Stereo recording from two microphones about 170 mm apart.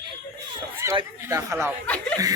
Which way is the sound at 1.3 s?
15° right (ahead or behind).